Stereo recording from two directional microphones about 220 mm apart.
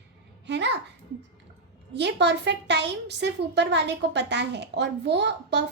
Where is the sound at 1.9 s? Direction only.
50° right (ahead or behind).